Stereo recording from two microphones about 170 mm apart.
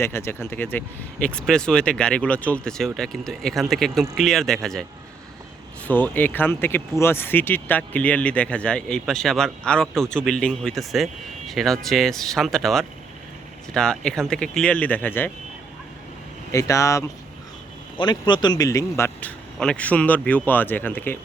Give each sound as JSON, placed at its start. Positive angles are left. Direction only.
{"t": 0.0, "sound": "speech", "side_deg": 15}
{"t": 5.9, "sound": "speech", "side_deg": 10}
{"t": 16.5, "sound": "speech", "side_deg": 20}